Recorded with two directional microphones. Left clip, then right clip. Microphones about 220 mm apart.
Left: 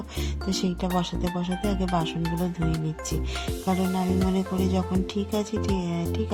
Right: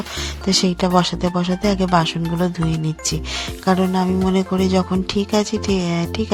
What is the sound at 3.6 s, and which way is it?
Speech, 15° right (ahead or behind).